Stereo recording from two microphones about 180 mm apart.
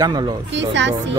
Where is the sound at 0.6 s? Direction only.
85° right.